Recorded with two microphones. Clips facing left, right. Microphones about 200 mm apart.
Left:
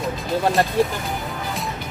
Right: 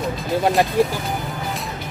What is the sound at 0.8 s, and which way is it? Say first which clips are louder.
Speech: right 1 dB; 15° right (ahead or behind).